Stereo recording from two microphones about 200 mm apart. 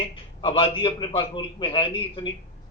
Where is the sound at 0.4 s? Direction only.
25° left (ahead or behind).